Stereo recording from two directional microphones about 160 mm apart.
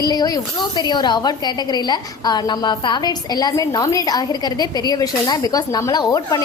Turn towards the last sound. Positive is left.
turn(degrees=25)  # may be behind; listen again after turning